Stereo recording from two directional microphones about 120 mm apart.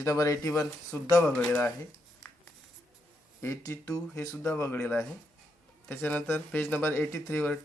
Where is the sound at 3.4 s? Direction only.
25° left (ahead or behind).